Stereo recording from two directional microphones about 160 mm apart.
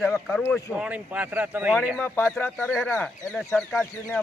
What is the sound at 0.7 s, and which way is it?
Speech, 10° right (ahead or behind).